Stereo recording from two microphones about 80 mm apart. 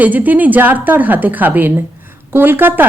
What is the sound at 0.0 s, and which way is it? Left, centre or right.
Speech, right.